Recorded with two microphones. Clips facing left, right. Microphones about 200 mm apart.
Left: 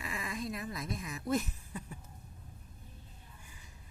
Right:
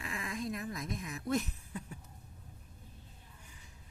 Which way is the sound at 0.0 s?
5° left (ahead or behind).